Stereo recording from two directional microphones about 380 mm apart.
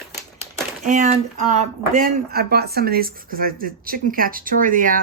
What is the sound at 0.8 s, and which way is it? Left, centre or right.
Speech, centre.